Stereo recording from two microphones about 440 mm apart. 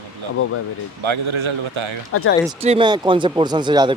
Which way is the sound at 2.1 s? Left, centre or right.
Left.